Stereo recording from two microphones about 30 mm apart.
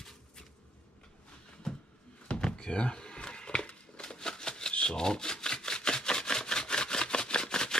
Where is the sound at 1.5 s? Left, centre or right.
Left.